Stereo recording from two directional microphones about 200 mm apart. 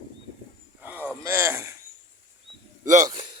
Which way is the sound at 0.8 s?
10° right (ahead or behind).